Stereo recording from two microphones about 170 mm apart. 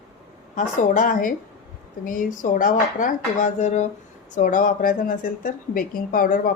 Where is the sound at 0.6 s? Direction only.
50° left (ahead or behind).